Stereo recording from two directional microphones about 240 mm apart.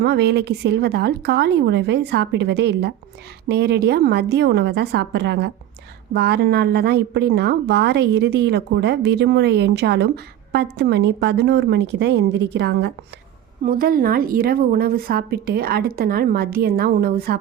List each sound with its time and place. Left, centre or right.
0.0 s a woman's voice: right